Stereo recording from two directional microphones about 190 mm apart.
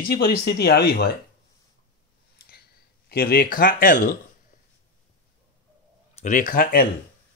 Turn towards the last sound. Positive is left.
turn(degrees=55)  # may be behind; listen again after turning